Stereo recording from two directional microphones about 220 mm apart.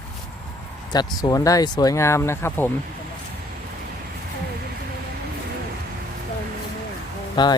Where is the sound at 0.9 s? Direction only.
20° left (ahead or behind).